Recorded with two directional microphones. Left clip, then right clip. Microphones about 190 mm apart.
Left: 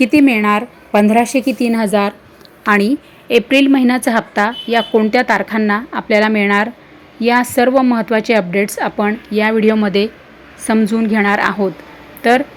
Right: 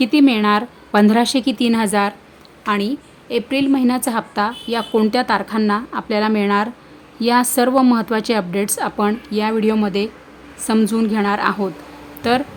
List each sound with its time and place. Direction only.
0.0 s a woman's voice: 5° right (ahead or behind); by 2.1 s 10° left (ahead or behind)
2.6 s a woman's voice: 30° left (ahead or behind)
3.2 s a woman's voice: 15° left (ahead or behind)